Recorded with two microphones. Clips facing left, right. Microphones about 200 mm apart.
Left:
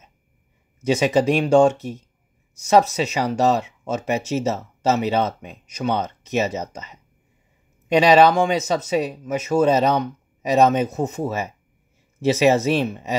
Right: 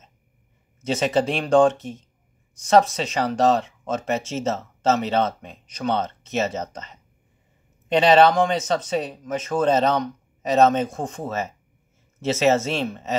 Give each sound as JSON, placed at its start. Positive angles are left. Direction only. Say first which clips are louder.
{"t": 0.7, "sound": "speech", "louder": "left 3 dB", "side_deg": 10}